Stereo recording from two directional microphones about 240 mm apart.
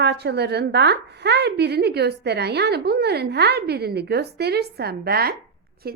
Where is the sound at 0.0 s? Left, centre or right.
Right.